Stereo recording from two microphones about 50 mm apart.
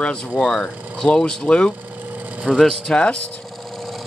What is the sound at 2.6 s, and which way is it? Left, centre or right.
Speech, centre.